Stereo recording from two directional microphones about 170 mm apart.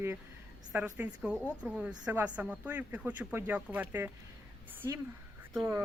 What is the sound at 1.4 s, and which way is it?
Speech, 10° left (ahead or behind).